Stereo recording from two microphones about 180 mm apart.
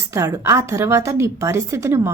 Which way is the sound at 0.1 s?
15° right (ahead or behind).